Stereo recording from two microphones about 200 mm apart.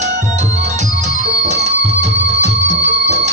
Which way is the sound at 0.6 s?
35° right (ahead or behind).